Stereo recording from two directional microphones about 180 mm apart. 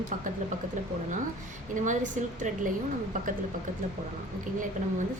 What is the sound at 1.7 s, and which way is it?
A woman's voice, 45° right (ahead or behind).